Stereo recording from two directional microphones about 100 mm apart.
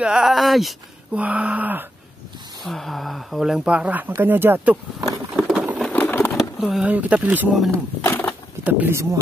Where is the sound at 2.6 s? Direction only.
Centre (ahead or behind); by 4.7 s 20° right (ahead or behind).